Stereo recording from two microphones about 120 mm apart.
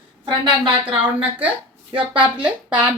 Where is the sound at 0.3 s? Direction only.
40° right (ahead or behind).